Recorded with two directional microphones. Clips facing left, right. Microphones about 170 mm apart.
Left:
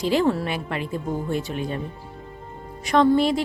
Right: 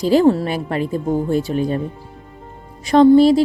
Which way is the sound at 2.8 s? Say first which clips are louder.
Right 8 dB; 30° right (ahead or behind).